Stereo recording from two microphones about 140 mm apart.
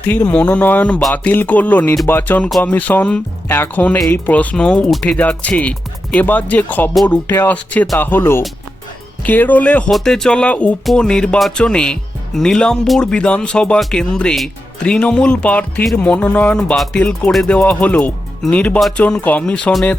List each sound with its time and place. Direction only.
0.1 s speech: 10° left (ahead or behind)
7.3 s speech: 15° left (ahead or behind)